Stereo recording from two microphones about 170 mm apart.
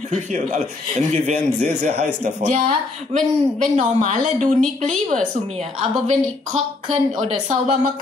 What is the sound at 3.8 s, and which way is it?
Speech, 45° right (ahead or behind).